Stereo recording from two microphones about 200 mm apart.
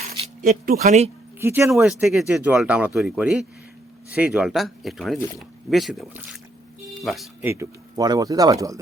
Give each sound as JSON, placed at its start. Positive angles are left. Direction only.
{"t": 0.4, "sound": "speech", "side_deg": -45}
{"t": 1.4, "sound": "speech", "side_deg": -10}
{"t": 7.6, "sound": "speech", "side_deg": -20}